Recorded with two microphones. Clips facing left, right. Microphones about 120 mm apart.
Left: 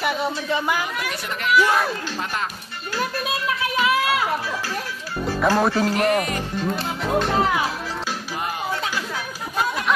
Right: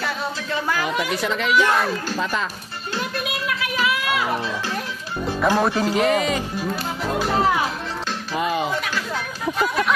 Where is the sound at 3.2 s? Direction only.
30° left (ahead or behind).